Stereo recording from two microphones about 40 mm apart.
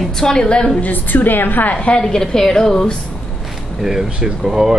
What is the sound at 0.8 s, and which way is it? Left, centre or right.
Speech, left.